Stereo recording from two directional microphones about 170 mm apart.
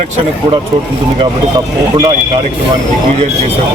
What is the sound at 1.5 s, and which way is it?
Speech, 25° right (ahead or behind).